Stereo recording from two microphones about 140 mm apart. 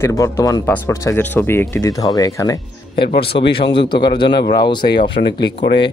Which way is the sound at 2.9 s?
40° left (ahead or behind).